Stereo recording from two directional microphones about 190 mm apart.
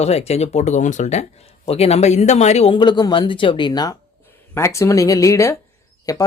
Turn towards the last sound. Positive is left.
turn(degrees=20)  # may be behind; listen again after turning